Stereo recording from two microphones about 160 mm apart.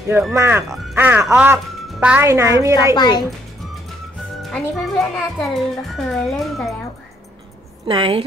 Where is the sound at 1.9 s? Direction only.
10° right (ahead or behind).